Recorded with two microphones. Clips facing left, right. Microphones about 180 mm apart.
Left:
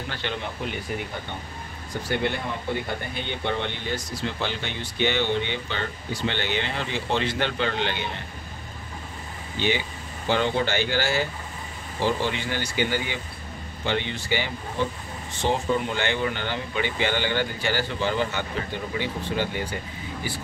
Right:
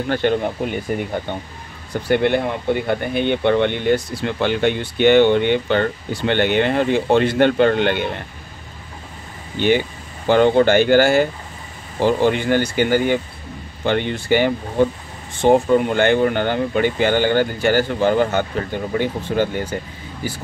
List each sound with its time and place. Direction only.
0.1 s speech: 50° right (ahead or behind)
2.0 s speech: 60° right (ahead or behind)
9.6 s speech: 50° right (ahead or behind)